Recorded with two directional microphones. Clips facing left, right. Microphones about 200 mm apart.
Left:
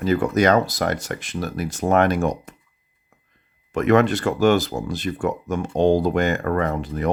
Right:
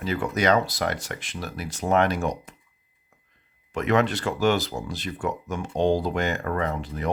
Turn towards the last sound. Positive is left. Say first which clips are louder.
# left 5 dB
turn(degrees=50)  # may be behind; listen again after turning